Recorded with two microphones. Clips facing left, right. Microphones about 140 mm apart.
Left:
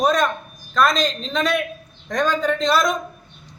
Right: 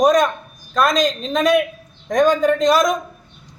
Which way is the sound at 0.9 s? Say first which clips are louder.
Right 4 dB; 45° right (ahead or behind).